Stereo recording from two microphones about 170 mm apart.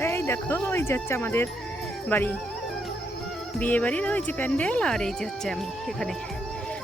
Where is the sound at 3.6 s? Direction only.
10° left (ahead or behind).